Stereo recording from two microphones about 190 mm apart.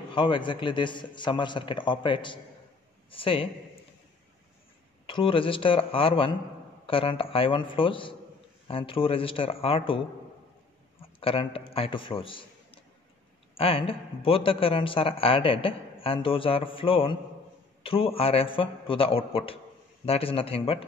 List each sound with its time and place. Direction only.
0.1 s a man's voice: 25° left (ahead or behind)
5.0 s a man's voice: 25° left (ahead or behind)
11.0 s a sound: 30° left (ahead or behind)
11.7 s a man's voice: 30° left (ahead or behind)